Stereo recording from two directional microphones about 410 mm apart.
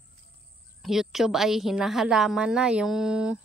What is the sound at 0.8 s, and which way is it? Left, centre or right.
A woman's voice, centre.